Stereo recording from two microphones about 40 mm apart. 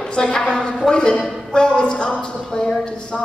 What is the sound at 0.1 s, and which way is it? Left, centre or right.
Speech, left.